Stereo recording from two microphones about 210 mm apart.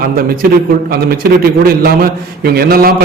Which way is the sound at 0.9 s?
45° right (ahead or behind).